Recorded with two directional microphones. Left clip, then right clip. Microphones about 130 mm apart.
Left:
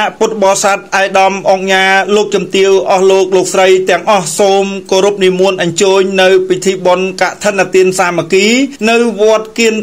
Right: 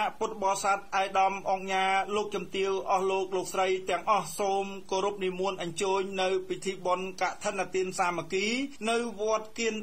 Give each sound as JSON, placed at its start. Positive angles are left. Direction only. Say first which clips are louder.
{"t": 0.0, "sound": "a man's voice", "louder": "left 19 dB", "side_deg": 20}